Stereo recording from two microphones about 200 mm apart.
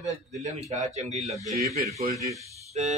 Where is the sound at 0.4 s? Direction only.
35° right (ahead or behind).